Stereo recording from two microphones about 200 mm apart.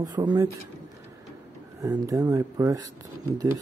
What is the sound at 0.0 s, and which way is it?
Speech, 20° right (ahead or behind).